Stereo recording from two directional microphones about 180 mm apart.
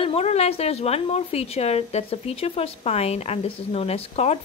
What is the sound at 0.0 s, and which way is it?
Speech, 35° left (ahead or behind).